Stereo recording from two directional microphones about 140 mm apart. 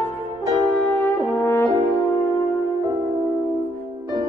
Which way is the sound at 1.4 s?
15° left (ahead or behind).